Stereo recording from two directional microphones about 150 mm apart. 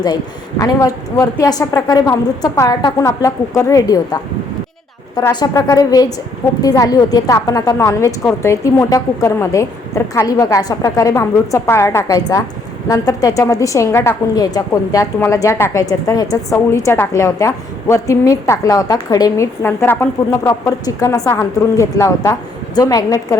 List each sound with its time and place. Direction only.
0.6 s a woman's voice: 25° left (ahead or behind)
5.3 s a woman's voice: 25° left (ahead or behind)